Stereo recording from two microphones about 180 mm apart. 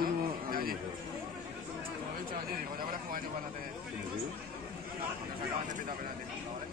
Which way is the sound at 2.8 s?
50° right (ahead or behind).